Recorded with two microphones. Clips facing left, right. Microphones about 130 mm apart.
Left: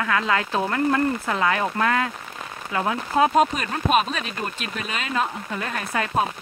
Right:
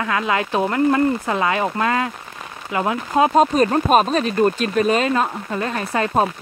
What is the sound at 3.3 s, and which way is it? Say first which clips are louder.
Speech: right 6 dB; 35° right (ahead or behind).